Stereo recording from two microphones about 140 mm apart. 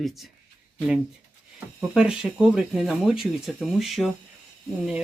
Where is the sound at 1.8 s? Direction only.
5° right (ahead or behind).